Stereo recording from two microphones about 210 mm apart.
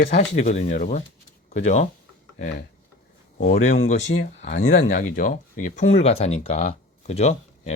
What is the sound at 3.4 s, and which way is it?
Speech, 35° left (ahead or behind).